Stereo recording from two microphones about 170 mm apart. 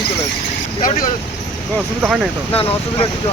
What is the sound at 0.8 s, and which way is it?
Speech, 55° left (ahead or behind).